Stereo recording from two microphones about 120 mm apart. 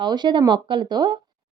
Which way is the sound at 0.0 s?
40° right (ahead or behind).